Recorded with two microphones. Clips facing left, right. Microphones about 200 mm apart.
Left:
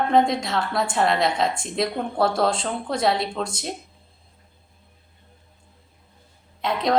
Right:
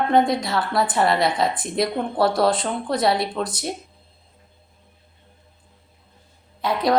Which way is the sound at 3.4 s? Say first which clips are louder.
Right 2 dB; 25° left (ahead or behind).